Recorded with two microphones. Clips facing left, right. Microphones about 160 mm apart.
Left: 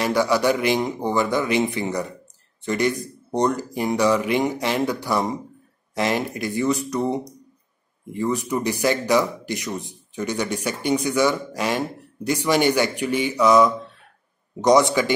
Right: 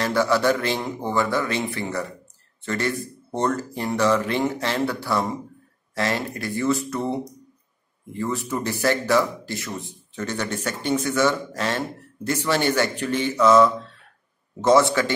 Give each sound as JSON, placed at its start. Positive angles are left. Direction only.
{"t": 0.0, "sound": "speech", "side_deg": 15}